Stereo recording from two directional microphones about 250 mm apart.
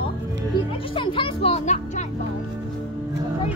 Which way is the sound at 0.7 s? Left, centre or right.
Centre.